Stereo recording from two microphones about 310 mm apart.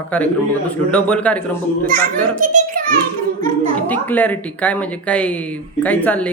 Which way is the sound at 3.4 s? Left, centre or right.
Centre.